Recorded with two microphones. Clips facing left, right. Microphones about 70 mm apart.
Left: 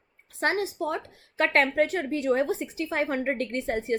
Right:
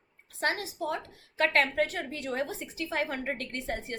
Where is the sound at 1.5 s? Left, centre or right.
Left.